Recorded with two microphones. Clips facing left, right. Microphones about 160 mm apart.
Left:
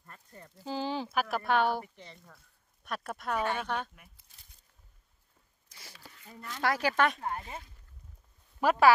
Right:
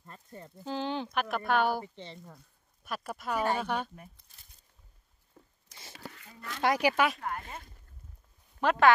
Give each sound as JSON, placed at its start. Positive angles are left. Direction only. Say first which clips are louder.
{"t": 0.0, "sound": "speech", "louder": "right 4 dB", "side_deg": -25}
{"t": 0.7, "sound": "speech", "louder": "even", "side_deg": 5}
{"t": 1.8, "sound": "speech", "louder": "right 2 dB", "side_deg": -30}
{"t": 2.8, "sound": "speech", "louder": "even", "side_deg": 0}
{"t": 5.9, "sound": "a sound", "louder": "right 13 dB", "side_deg": -75}
{"t": 6.6, "sound": "speech", "louder": "right 2 dB", "side_deg": -15}
{"t": 7.2, "sound": "speech", "louder": "left 1 dB", "side_deg": 25}
{"t": 8.5, "sound": "speech", "louder": "left 1 dB", "side_deg": 10}